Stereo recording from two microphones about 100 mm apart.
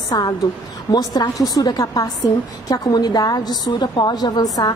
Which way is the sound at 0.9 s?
40° left (ahead or behind).